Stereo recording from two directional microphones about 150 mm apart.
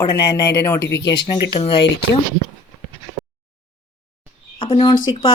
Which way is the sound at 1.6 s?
45° left (ahead or behind).